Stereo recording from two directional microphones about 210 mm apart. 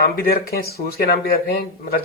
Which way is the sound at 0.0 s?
45° left (ahead or behind).